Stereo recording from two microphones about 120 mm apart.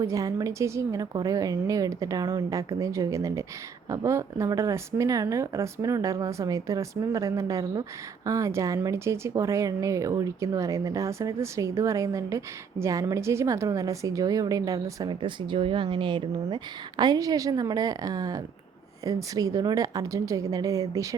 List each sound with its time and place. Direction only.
0.0 s speech: 25° right (ahead or behind)
15.1 s speech: 40° right (ahead or behind)
17.0 s a woman's voice: 30° right (ahead or behind)